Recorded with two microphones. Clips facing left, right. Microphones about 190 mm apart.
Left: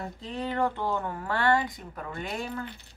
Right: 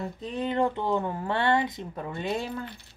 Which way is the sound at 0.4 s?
20° right (ahead or behind).